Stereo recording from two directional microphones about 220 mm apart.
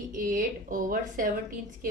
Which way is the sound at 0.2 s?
40° right (ahead or behind).